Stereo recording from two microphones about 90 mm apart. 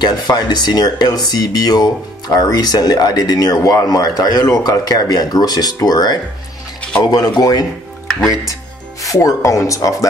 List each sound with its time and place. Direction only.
0.0 s speech: 50° left (ahead or behind)
9.0 s speech: 35° left (ahead or behind)